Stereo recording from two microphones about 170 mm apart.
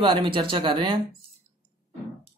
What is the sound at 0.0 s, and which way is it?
Speech, 25° right (ahead or behind).